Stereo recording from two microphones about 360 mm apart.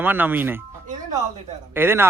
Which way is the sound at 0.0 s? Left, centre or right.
Centre.